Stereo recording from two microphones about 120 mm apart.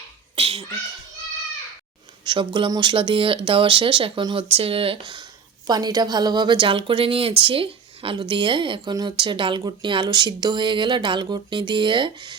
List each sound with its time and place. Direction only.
0.3 s a sound: 50° right (ahead or behind)
2.2 s speech: 40° right (ahead or behind)
5.6 s a woman's voice: 35° right (ahead or behind)